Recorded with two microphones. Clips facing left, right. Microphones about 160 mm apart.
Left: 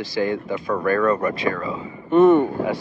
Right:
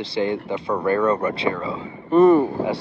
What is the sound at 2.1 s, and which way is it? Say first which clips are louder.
Speech: even; centre (ahead or behind).